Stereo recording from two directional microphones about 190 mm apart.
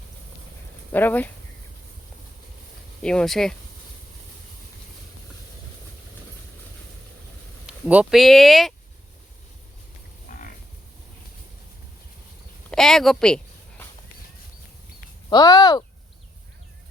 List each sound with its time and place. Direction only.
0.9 s speech: 10° left (ahead or behind)
3.0 s speech: 5° left (ahead or behind)
7.7 s speech: 5° right (ahead or behind)
10.2 s livestock: 45° left (ahead or behind)
12.7 s a sound: centre (ahead or behind)
15.3 s speech: 20° left (ahead or behind)